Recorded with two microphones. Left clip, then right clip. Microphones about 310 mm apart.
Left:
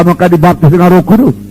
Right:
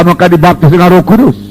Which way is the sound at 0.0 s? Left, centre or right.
Right.